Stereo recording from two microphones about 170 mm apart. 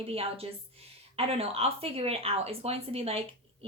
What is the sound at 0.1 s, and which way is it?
Speech, 35° right (ahead or behind).